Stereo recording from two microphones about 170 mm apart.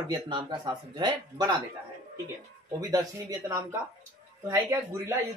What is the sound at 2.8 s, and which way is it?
Speech, 20° right (ahead or behind).